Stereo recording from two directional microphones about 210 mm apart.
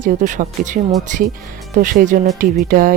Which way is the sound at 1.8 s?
40° right (ahead or behind).